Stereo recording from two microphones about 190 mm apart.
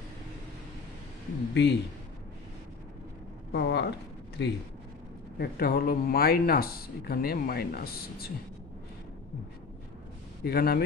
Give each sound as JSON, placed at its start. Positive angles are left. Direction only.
{"t": 1.5, "sound": "speech", "side_deg": 65}
{"t": 3.5, "sound": "speech", "side_deg": 65}
{"t": 5.4, "sound": "speech", "side_deg": 50}
{"t": 10.4, "sound": "speech", "side_deg": 55}